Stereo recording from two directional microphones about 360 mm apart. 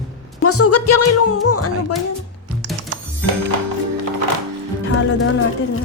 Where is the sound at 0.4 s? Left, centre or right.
Left.